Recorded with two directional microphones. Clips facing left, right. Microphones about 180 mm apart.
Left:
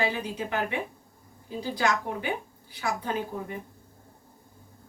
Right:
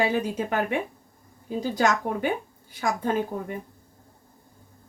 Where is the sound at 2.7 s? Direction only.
45° right (ahead or behind).